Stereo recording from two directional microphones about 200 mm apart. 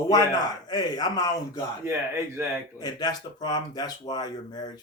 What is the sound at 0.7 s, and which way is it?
Speech, 20° left (ahead or behind).